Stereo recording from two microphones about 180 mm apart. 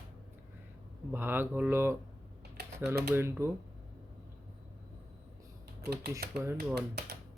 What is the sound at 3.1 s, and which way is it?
Speech, 10° right (ahead or behind).